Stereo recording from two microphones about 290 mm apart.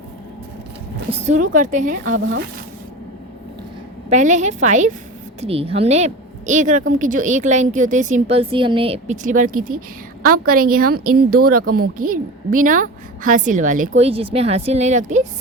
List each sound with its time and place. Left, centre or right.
1.1 s a woman's voice: right
4.1 s a woman's voice: right